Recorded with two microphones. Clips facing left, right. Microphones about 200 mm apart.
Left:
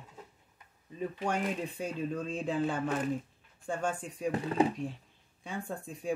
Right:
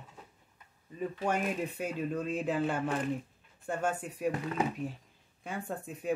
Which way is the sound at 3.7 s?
5° right (ahead or behind).